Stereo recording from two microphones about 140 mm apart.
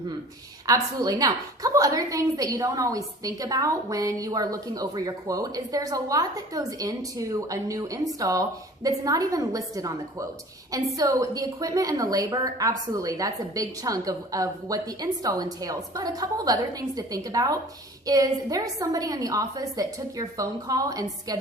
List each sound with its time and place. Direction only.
0.7 s a woman's voice: 25° right (ahead or behind)